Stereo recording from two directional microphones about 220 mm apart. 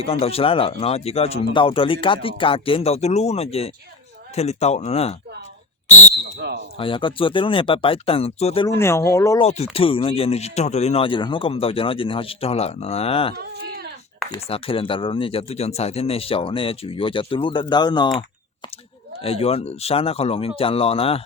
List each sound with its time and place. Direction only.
0.0 s speech: 25° left (ahead or behind)
6.7 s speech: 25° left (ahead or behind)
8.6 s speech: 10° left (ahead or behind)
9.4 s speech: 30° left (ahead or behind)
13.3 s a sound: 45° right (ahead or behind)
14.3 s speech: 25° left (ahead or behind)
19.2 s speech: 25° left (ahead or behind)